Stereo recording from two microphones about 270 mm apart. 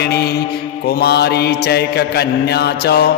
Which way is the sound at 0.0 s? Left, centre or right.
Left.